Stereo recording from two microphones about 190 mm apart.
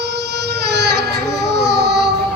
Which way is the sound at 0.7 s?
60° right (ahead or behind).